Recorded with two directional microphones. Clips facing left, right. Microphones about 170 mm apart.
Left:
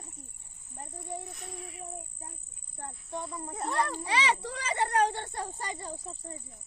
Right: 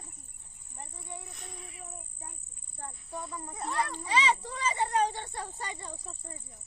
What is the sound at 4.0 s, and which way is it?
A child's voice, 70° left (ahead or behind).